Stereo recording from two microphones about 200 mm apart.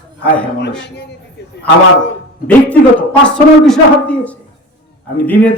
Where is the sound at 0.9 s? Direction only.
55° left (ahead or behind).